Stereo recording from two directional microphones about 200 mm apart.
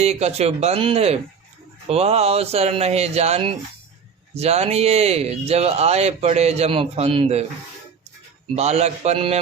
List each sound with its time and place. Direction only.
0.0 s speech: 30° right (ahead or behind)
8.5 s speech: 35° right (ahead or behind)